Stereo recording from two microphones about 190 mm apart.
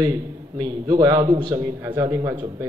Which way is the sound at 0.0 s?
20° right (ahead or behind).